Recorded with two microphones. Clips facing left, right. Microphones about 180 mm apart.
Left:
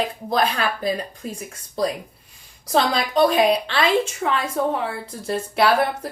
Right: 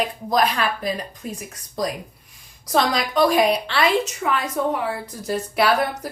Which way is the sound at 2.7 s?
25° left (ahead or behind).